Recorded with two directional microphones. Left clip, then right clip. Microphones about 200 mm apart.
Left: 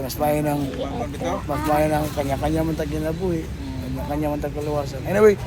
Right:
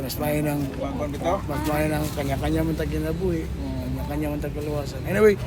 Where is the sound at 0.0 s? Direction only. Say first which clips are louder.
Left 4 dB; 10° left (ahead or behind).